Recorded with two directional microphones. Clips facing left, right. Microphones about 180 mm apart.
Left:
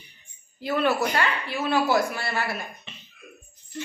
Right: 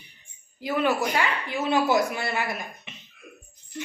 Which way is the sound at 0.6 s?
15° right (ahead or behind).